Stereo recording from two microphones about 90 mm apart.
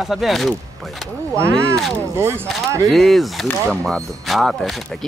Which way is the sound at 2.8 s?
Centre (ahead or behind).